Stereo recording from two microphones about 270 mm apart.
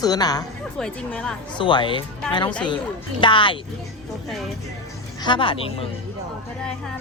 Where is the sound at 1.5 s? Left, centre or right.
Centre.